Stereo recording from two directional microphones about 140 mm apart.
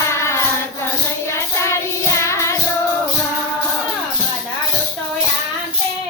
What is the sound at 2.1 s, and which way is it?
Music, 20° left (ahead or behind).